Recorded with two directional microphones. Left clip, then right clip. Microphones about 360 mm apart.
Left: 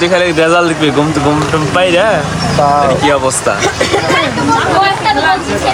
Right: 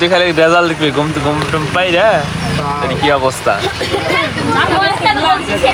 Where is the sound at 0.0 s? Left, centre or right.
Centre.